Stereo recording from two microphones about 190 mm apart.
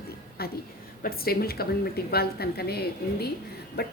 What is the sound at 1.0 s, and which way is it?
Speech, 55° left (ahead or behind).